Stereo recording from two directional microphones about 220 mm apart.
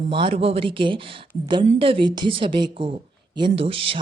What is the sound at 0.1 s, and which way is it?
Speech, 25° right (ahead or behind).